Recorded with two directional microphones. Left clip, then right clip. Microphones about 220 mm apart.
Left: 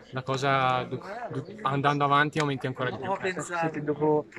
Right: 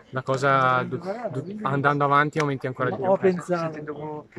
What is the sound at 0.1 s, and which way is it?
Speech, 5° right (ahead or behind).